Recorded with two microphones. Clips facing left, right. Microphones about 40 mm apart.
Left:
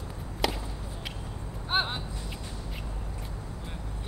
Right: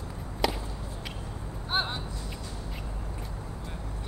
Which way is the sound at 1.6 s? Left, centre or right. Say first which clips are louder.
Left 1 dB; centre.